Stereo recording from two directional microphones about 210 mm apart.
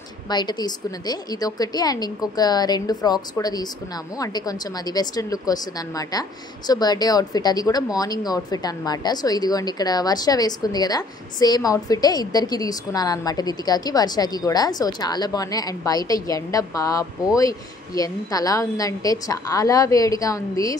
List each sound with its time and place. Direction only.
0.3 s a woman's voice: 20° left (ahead or behind)